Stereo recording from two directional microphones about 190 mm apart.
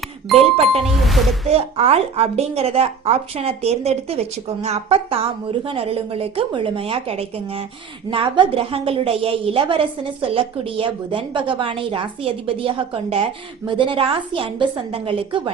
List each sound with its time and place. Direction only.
0.5 s speech: 30° right (ahead or behind)
0.9 s speech: centre (ahead or behind)
1.5 s a woman's voice: 30° right (ahead or behind)